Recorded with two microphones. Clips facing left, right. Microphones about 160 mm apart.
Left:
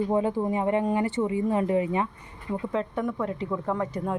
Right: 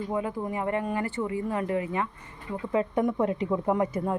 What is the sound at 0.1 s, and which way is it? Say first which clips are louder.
Speech: left 5 dB; 30° left (ahead or behind).